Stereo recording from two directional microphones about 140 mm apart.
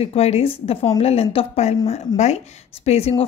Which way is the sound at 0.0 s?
50° left (ahead or behind).